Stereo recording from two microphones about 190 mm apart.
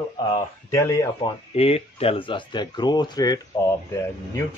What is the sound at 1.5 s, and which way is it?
Speech, 30° left (ahead or behind).